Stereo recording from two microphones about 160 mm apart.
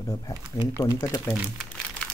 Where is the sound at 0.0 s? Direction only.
20° left (ahead or behind).